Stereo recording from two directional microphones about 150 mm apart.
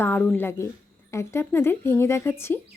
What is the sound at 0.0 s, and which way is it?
Speech, 10° left (ahead or behind).